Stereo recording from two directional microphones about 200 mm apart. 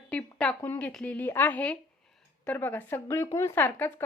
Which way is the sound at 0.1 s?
5° left (ahead or behind).